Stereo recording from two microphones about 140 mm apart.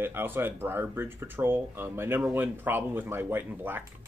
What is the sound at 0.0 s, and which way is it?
Speech, 15° right (ahead or behind).